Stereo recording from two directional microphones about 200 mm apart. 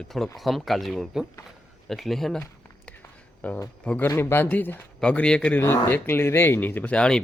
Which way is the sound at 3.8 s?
10° left (ahead or behind).